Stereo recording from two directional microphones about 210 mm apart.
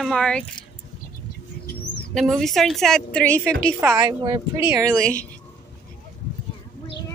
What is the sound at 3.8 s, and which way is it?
Speech, 15° right (ahead or behind).